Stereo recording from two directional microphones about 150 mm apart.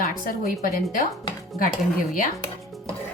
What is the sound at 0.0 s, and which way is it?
A woman's voice, 65° left (ahead or behind).